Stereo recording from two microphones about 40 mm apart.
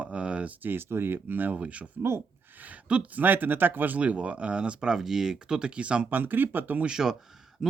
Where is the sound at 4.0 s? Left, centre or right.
Right.